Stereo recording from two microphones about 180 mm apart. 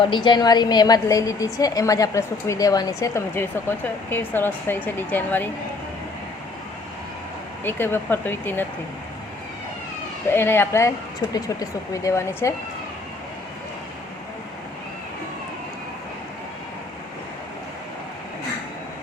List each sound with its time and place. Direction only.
0.0 s a woman's voice: 25° left (ahead or behind)
7.6 s speech: 10° left (ahead or behind)
10.3 s speech: 10° left (ahead or behind)